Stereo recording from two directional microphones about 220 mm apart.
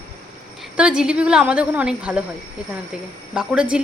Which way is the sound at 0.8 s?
5° right (ahead or behind).